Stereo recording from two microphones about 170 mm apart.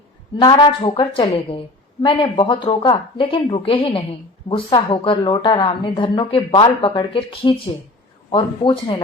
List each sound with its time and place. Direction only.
0.3 s a woman's voice: 25° left (ahead or behind)